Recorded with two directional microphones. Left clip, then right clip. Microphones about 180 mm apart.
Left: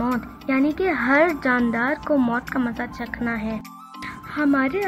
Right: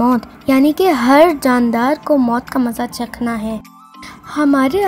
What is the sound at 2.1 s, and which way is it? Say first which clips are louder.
Speech: right 6 dB; 25° right (ahead or behind).